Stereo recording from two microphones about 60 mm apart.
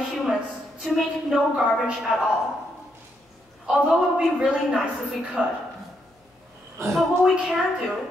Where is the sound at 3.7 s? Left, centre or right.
Centre.